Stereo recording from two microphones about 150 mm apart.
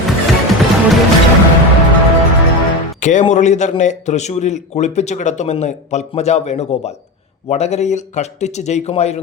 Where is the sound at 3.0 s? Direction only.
50° left (ahead or behind).